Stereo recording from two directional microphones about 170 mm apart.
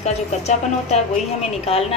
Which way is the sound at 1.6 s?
35° left (ahead or behind).